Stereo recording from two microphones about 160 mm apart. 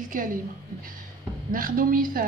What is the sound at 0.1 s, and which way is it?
Speech, 60° right (ahead or behind).